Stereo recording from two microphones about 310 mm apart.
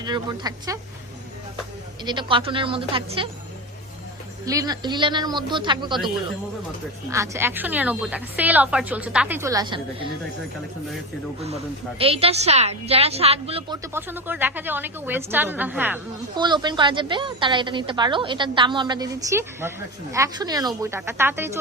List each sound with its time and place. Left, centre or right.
0.0 s a woman's voice: centre
2.0 s a woman's voice: centre
4.4 s a woman's voice: centre
7.1 s a woman's voice: centre
11.3 s a woman's voice: centre